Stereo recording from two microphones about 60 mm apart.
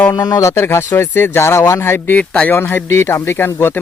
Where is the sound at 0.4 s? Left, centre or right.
Left.